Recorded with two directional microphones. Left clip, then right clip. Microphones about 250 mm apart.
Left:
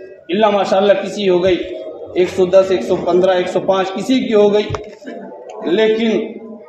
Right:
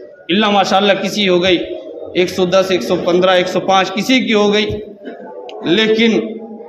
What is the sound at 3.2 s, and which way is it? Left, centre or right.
A man's voice, right.